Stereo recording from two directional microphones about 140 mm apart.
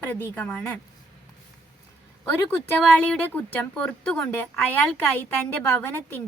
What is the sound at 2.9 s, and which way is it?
A woman's voice, 10° left (ahead or behind).